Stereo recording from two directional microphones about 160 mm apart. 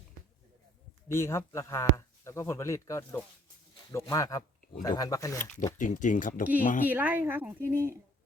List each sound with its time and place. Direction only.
1.0 s speech: 15° left (ahead or behind)
5.7 s speech: 55° left (ahead or behind)
6.8 s speech: 10° right (ahead or behind)